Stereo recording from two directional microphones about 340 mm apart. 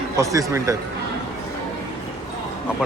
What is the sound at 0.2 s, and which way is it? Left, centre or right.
Speech, centre.